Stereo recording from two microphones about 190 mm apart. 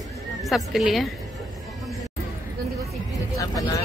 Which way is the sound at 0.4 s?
Centre (ahead or behind).